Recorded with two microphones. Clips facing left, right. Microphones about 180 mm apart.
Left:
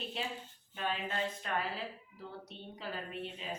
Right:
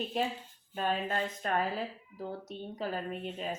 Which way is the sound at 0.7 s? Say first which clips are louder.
Right 5 dB; 45° right (ahead or behind).